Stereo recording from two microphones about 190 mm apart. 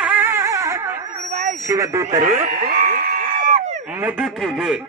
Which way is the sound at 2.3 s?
45° right (ahead or behind).